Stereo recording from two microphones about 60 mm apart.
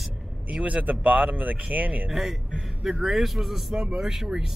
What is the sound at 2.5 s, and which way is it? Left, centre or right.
Speech, centre.